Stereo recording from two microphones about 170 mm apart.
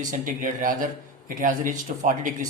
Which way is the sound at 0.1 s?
50° right (ahead or behind).